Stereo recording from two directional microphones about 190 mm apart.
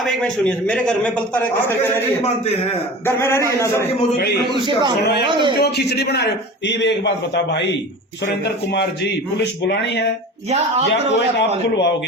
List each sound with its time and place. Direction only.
0.0 s a man's voice: 5° left (ahead or behind)
3.2 s a man's voice: 15° left (ahead or behind)
5.2 s a man's voice: 25° right (ahead or behind)
5.5 s a man's voice: 60° left (ahead or behind)
9.4 s a man's voice: 65° left (ahead or behind)